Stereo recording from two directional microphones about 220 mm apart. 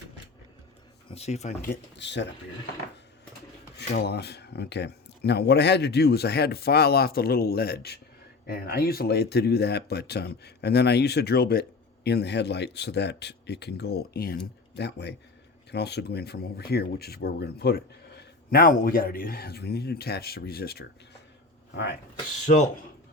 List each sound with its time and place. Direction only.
1.1 s speech: 30° left (ahead or behind)
2.0 s speech: 55° left (ahead or behind)
3.8 s speech: 50° left (ahead or behind)